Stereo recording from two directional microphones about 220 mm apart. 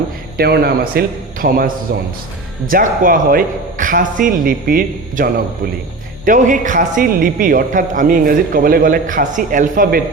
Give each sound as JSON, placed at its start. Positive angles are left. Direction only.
{"t": 0.3, "sound": "a man's voice", "side_deg": -45}